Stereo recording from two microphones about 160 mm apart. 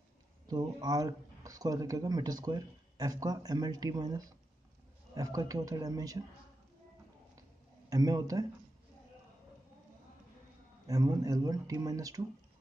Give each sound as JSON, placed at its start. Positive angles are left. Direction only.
{"t": 0.5, "sound": "speech", "side_deg": -25}
{"t": 7.9, "sound": "speech", "side_deg": -25}
{"t": 10.9, "sound": "speech", "side_deg": -25}